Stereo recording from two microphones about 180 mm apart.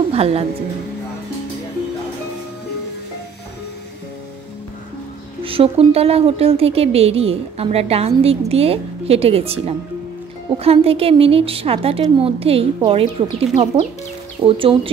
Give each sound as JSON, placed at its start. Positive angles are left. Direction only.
{"t": 0.1, "sound": "a woman's voice", "side_deg": -35}
{"t": 5.4, "sound": "a woman's voice", "side_deg": -30}